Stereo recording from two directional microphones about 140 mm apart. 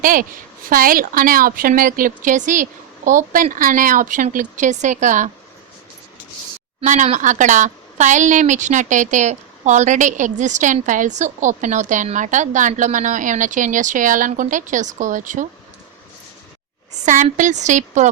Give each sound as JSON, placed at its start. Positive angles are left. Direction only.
{"t": 0.0, "sound": "a woman's voice", "side_deg": -80}
{"t": 6.8, "sound": "a woman's voice", "side_deg": -60}
{"t": 17.3, "sound": "a woman's voice", "side_deg": -60}